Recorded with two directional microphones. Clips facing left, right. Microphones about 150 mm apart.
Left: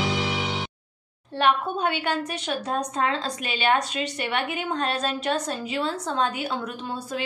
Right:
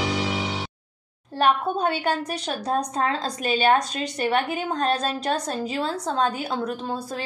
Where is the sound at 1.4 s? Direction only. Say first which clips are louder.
Right 1 dB; 40° right (ahead or behind).